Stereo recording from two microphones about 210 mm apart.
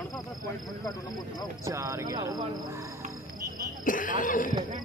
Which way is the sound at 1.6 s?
15° right (ahead or behind).